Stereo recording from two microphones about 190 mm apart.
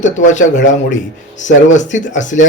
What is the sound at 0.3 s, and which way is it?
Speech, 40° left (ahead or behind).